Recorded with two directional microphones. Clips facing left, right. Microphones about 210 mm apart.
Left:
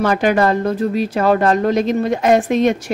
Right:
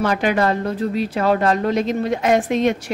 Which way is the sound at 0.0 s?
45° left (ahead or behind).